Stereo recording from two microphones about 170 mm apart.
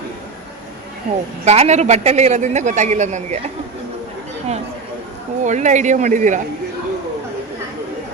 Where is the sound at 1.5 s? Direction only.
40° right (ahead or behind).